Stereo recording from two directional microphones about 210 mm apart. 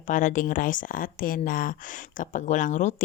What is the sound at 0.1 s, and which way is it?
Speech, 40° left (ahead or behind).